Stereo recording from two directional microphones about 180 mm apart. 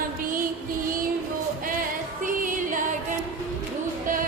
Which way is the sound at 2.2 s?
50° right (ahead or behind).